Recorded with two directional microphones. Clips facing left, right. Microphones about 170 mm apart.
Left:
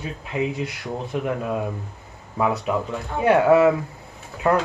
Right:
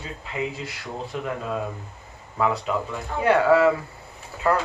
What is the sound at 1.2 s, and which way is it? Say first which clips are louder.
Speech: left 2 dB; 15° left (ahead or behind).